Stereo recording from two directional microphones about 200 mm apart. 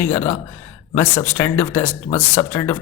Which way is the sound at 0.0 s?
10° left (ahead or behind).